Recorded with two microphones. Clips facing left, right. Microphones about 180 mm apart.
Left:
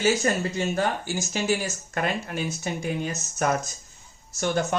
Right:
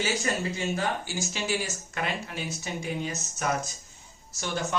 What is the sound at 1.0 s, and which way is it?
A man's voice, 45° left (ahead or behind).